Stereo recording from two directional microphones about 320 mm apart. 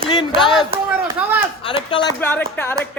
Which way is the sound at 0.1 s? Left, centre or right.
Centre.